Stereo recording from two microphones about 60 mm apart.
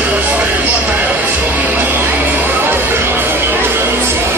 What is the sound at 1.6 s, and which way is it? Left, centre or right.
Music, right.